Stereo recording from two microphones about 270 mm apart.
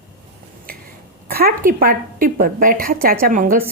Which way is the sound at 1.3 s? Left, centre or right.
Right.